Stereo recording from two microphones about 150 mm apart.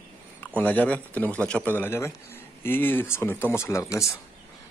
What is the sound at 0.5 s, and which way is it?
Speech, 10° left (ahead or behind).